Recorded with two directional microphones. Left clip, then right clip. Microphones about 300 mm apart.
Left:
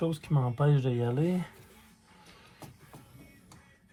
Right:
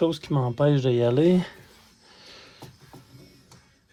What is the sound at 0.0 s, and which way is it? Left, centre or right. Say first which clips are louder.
Speech: right 8 dB; right.